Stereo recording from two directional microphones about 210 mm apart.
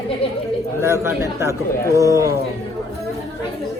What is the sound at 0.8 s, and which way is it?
A man's voice, 10° right (ahead or behind).